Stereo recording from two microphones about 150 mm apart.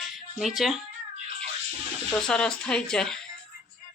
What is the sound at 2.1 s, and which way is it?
Speech, 5° left (ahead or behind).